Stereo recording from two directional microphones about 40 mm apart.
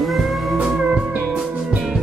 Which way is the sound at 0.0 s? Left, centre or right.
Centre.